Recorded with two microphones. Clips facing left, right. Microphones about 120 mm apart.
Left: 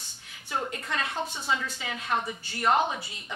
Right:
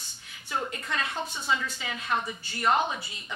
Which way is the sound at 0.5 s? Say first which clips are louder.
Even; 40° left (ahead or behind).